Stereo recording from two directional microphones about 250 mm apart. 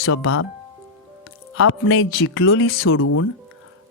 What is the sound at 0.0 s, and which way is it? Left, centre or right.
Speech, left.